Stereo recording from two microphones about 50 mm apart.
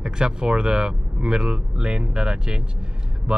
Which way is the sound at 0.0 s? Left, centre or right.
Centre.